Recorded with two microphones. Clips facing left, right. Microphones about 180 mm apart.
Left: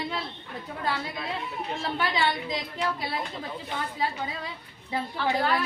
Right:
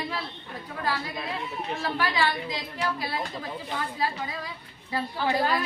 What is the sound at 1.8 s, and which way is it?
Speech, 25° left (ahead or behind).